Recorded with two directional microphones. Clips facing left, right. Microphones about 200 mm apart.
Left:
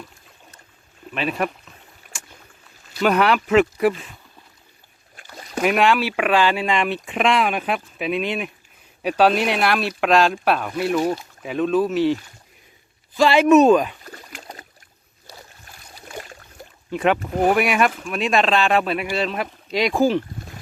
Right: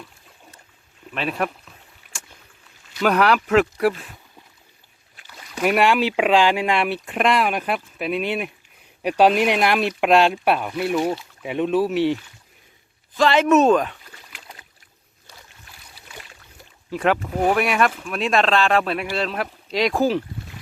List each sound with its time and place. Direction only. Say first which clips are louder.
1.1 s speech: left 1 dB; centre (ahead or behind)
3.0 s speech: even; centre (ahead or behind)
5.1 s rowboat: left 7 dB; 45° left (ahead or behind)
5.7 s speech: right 2 dB; 10° right (ahead or behind)
10.3 s speech: even; 5° right (ahead or behind)
13.1 s speech: left 3 dB; 10° left (ahead or behind)
14.0 s rowboat: left 7 dB; 45° left (ahead or behind)
15.3 s boat: left 4 dB; 40° left (ahead or behind)
16.9 s speech: left 1 dB; centre (ahead or behind)